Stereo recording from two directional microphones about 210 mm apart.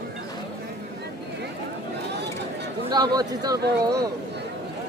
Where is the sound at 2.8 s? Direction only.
20° right (ahead or behind).